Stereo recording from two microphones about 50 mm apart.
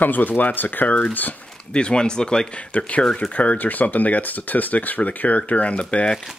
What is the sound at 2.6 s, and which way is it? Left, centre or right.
Speech, left.